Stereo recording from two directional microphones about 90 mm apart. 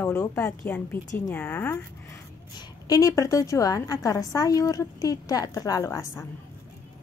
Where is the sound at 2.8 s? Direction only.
40° left (ahead or behind).